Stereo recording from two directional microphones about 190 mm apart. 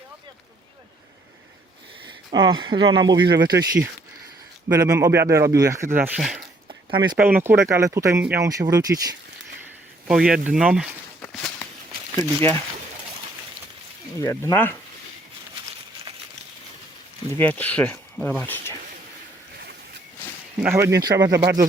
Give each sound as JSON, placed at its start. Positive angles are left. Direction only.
{"t": 2.0, "sound": "speech", "side_deg": -25}
{"t": 10.1, "sound": "speech", "side_deg": -5}
{"t": 11.2, "sound": "walk", "side_deg": 10}
{"t": 12.1, "sound": "speech", "side_deg": 15}
{"t": 14.2, "sound": "speech", "side_deg": 15}
{"t": 17.3, "sound": "speech", "side_deg": 10}
{"t": 20.6, "sound": "speech", "side_deg": -15}